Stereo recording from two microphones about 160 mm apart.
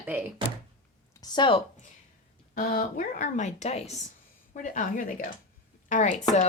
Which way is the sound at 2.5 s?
60° left (ahead or behind).